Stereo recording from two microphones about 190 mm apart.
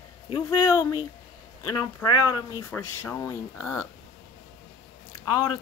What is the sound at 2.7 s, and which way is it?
Speech, 15° left (ahead or behind).